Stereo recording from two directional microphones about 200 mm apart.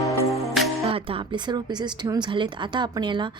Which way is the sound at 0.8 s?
30° right (ahead or behind).